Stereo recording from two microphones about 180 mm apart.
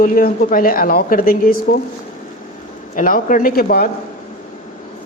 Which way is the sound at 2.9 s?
45° left (ahead or behind).